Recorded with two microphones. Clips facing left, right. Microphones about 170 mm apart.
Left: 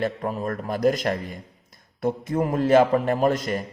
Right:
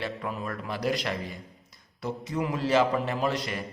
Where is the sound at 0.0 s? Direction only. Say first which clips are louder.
Left 7 dB; 45° left (ahead or behind).